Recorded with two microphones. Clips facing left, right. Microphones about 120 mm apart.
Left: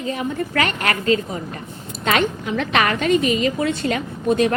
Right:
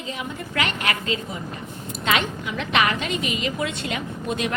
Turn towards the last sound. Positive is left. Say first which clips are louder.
# left 8 dB
turn(degrees=40)  # may be behind; listen again after turning